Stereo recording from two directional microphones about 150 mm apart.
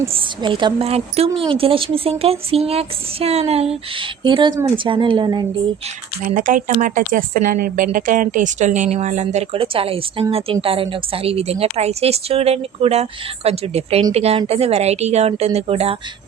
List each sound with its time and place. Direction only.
0.1 s a woman's voice: 30° right (ahead or behind)
6.2 s a woman's voice: 60° right (ahead or behind); by 16.0 s 40° right (ahead or behind)